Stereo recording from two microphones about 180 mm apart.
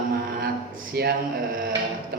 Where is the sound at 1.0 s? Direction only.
60° right (ahead or behind).